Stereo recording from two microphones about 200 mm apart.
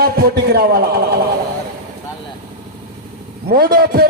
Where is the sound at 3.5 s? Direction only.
50° right (ahead or behind).